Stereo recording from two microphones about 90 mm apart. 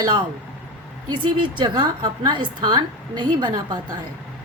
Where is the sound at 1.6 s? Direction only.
55° right (ahead or behind).